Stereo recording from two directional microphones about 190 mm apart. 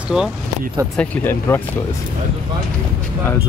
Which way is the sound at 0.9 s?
10° left (ahead or behind).